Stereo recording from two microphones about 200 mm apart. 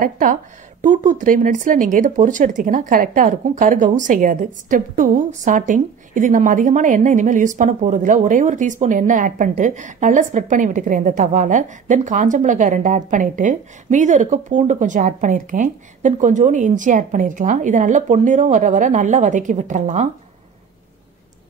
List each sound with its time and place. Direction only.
0.0 s speech: 40° right (ahead or behind)